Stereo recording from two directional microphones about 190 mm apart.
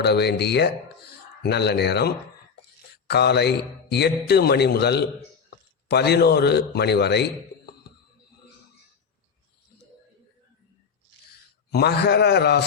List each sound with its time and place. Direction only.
0.0 s a man's voice: 60° left (ahead or behind)
11.7 s a man's voice: 60° left (ahead or behind)